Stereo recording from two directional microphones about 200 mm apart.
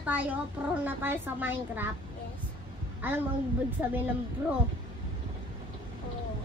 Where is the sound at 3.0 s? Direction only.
10° right (ahead or behind).